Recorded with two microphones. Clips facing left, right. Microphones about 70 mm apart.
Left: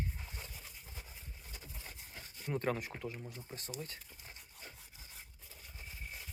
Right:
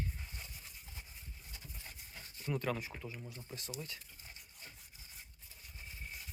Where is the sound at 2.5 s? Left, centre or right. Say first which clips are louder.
Left 1 dB; left.